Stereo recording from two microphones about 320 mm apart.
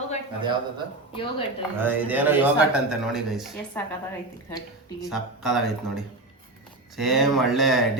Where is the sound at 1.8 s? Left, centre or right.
Centre.